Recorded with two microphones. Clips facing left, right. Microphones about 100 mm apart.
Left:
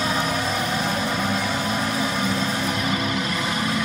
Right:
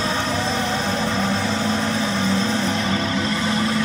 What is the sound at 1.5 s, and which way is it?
Vehicle, 30° right (ahead or behind).